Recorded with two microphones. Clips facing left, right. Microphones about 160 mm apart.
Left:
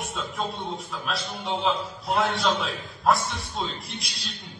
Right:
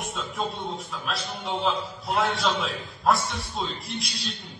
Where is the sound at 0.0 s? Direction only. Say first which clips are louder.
Even; centre (ahead or behind).